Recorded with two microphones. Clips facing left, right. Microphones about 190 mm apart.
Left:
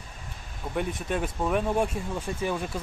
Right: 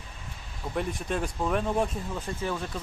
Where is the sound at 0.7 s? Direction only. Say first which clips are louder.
Left 1 dB; centre (ahead or behind).